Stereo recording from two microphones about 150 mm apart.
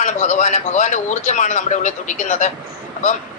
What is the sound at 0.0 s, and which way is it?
A man's voice, 55° left (ahead or behind).